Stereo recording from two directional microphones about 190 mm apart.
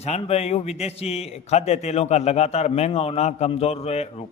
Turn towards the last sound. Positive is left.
turn(degrees=35)  # may be behind; listen again after turning